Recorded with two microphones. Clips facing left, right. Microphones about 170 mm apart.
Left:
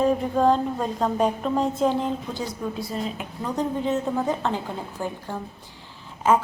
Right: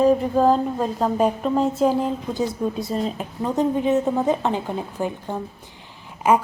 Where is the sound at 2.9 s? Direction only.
35° right (ahead or behind).